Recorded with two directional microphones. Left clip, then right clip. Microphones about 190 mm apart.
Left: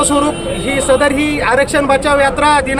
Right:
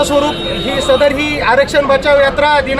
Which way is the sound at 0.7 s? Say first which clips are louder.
Right 1 dB; 25° left (ahead or behind).